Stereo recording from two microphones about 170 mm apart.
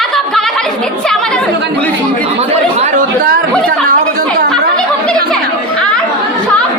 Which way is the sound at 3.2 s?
55° right (ahead or behind).